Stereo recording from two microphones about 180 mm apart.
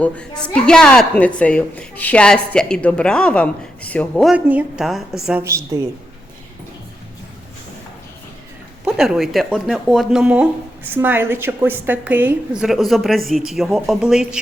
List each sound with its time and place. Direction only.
0.0 s speech: 5° left (ahead or behind)
4.4 s speech: 10° right (ahead or behind)
5.4 s a woman's voice: 15° right (ahead or behind)
8.8 s speech: centre (ahead or behind)